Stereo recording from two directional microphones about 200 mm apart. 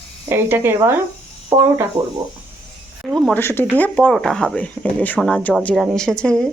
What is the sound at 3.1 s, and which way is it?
Speech, 5° left (ahead or behind).